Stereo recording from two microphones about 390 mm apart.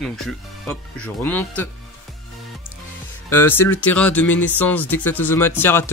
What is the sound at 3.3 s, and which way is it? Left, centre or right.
Speech, centre.